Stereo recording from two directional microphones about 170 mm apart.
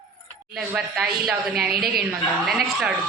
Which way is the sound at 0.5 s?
5° right (ahead or behind).